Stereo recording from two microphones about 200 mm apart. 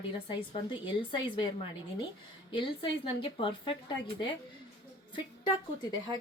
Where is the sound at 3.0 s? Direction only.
25° left (ahead or behind).